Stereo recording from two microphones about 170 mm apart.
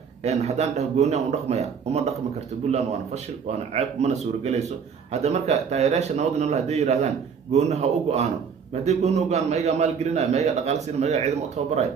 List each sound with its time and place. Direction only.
0.2 s a man's voice: 40° right (ahead or behind)